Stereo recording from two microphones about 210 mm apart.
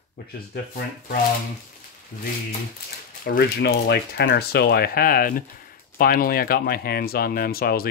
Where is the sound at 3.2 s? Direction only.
50° left (ahead or behind).